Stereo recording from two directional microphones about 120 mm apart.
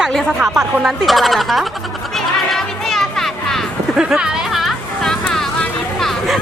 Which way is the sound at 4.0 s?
5° right (ahead or behind).